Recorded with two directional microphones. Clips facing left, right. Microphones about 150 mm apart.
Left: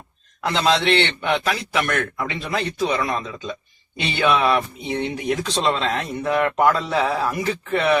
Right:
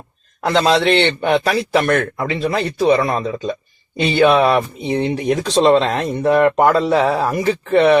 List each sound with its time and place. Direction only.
0.4 s a man's voice: 40° right (ahead or behind)
6.7 s a man's voice: 30° right (ahead or behind)